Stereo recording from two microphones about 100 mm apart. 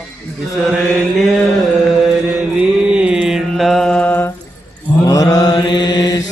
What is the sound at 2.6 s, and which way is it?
Mantra, 10° right (ahead or behind).